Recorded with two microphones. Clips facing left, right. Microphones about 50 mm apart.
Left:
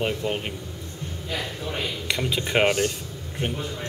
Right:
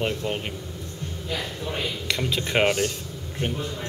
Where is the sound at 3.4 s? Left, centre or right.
Centre.